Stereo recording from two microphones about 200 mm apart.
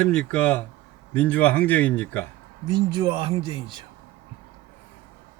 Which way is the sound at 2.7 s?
20° right (ahead or behind).